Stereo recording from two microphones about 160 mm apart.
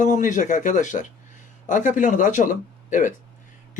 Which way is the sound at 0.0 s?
50° left (ahead or behind).